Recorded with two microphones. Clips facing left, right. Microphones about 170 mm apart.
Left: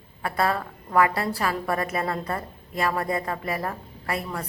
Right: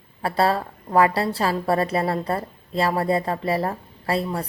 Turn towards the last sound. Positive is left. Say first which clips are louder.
# right 6 dB
turn(degrees=-30)  # may be behind; listen again after turning